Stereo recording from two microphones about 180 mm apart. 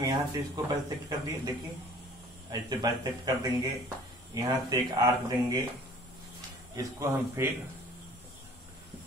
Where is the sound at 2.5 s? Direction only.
20° right (ahead or behind).